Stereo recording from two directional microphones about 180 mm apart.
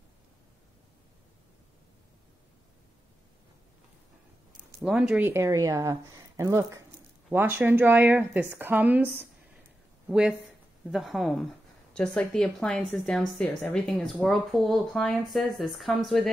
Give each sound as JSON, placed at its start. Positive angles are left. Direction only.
{"t": 4.8, "sound": "a woman's voice", "side_deg": -5}